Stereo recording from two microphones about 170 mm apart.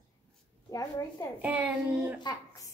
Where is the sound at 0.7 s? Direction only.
20° left (ahead or behind).